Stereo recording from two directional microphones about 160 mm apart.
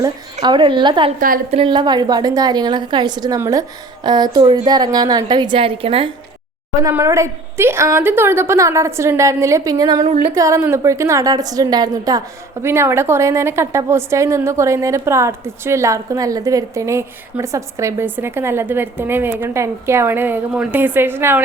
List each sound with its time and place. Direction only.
0.4 s a woman's voice: 30° right (ahead or behind)
6.8 s a woman's voice: 20° right (ahead or behind)